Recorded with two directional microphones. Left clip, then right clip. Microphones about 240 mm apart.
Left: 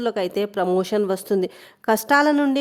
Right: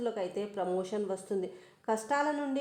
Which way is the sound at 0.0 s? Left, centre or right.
Left.